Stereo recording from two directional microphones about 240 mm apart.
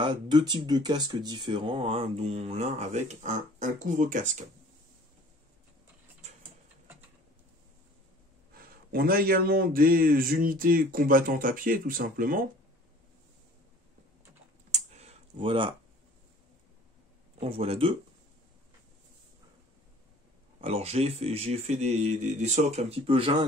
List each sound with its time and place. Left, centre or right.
0.0 s speech: centre
6.2 s mechanisms: right
8.9 s speech: right
14.7 s computer keyboard: right
17.4 s speech: right
20.6 s speech: right